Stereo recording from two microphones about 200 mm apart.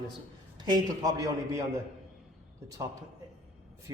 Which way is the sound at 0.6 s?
20° right (ahead or behind).